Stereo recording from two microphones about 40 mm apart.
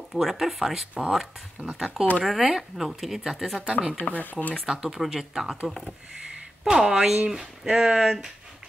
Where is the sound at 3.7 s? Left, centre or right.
Right.